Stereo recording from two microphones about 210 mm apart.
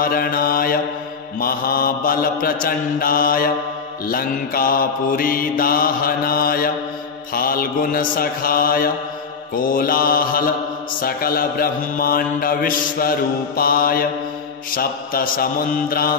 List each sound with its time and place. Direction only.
0.0 s mantra: 45° left (ahead or behind)